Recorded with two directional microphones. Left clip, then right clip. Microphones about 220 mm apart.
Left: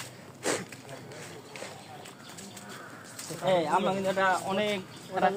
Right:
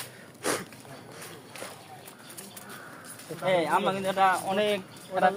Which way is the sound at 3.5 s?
30° right (ahead or behind).